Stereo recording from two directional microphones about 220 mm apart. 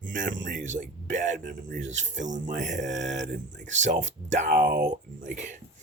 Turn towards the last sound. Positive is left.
turn(degrees=-35)  # may be behind; listen again after turning